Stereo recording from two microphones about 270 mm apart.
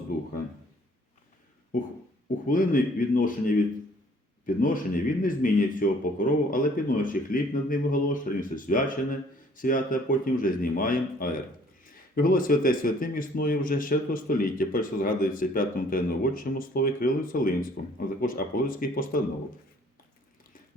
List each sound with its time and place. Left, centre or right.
2.5 s speech: left